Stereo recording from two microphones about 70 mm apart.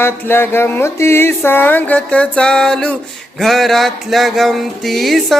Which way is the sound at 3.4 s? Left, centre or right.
Centre.